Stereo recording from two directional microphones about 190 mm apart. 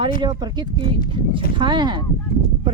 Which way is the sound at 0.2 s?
20° right (ahead or behind).